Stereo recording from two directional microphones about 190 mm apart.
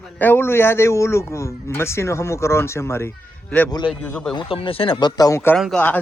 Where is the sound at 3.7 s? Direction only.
20° left (ahead or behind).